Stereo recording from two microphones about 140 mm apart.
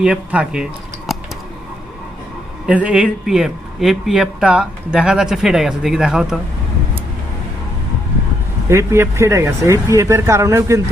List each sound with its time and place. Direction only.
0.0 s speech: 10° right (ahead or behind)
2.6 s speech: 10° right (ahead or behind)
8.7 s speech: 20° right (ahead or behind)